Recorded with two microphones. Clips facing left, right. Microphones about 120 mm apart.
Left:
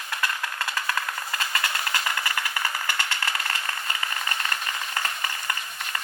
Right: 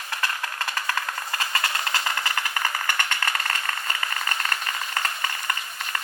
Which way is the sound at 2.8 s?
50° right (ahead or behind).